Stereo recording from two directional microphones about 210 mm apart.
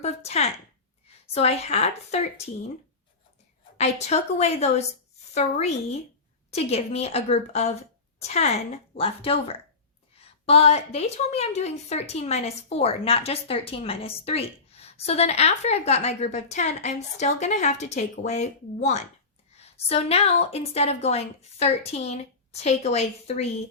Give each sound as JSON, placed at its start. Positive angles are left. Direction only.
{"t": 0.0, "sound": "a woman's voice", "side_deg": 30}
{"t": 3.8, "sound": "a woman's voice", "side_deg": 30}